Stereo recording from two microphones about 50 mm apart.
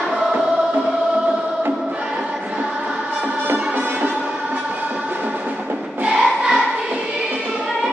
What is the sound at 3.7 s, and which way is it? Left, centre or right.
Music, right.